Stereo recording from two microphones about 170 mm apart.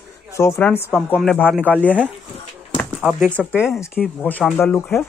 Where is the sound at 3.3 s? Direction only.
10° left (ahead or behind).